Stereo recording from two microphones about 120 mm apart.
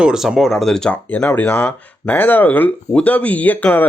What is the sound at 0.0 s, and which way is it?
Speech, 5° right (ahead or behind).